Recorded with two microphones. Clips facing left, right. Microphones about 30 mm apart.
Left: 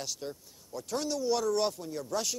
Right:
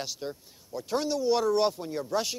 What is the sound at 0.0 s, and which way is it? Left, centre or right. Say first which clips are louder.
A man's voice: right 3 dB; centre.